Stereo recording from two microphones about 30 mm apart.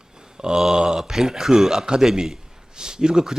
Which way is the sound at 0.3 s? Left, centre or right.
Right.